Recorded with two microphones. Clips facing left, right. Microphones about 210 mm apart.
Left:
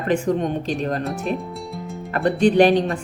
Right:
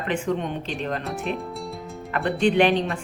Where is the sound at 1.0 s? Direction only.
Centre (ahead or behind).